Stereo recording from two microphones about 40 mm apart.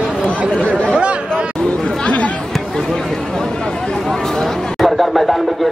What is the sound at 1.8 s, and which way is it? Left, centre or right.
Chatter, centre.